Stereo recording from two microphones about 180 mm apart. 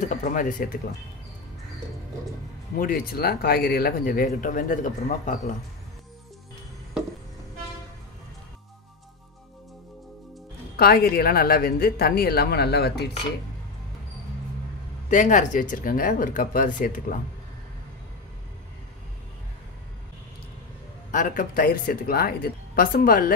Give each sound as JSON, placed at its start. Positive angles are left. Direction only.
{"t": 0.1, "sound": "speech", "side_deg": 45}
{"t": 2.8, "sound": "speech", "side_deg": 55}
{"t": 10.8, "sound": "speech", "side_deg": 60}
{"t": 15.0, "sound": "speech", "side_deg": 45}
{"t": 21.1, "sound": "speech", "side_deg": 50}